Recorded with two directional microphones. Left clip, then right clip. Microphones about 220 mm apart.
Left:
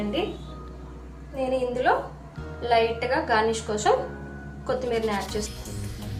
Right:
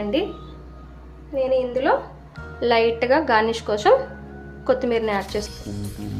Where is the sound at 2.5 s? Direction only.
35° right (ahead or behind).